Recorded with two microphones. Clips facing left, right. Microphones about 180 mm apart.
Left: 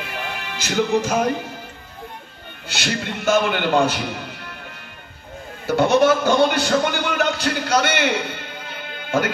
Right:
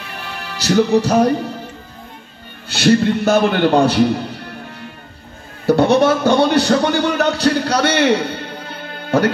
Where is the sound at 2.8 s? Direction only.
35° right (ahead or behind).